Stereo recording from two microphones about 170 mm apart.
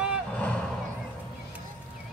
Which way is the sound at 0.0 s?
5° right (ahead or behind).